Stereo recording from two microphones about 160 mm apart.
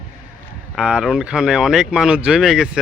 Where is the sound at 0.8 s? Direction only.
5° right (ahead or behind).